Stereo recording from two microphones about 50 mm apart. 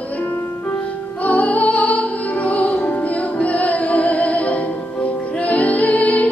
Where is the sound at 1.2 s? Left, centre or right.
Left.